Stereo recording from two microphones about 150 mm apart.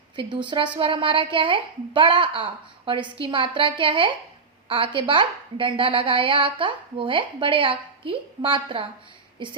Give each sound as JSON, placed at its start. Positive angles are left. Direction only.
{"t": 0.2, "sound": "a woman's voice", "side_deg": -30}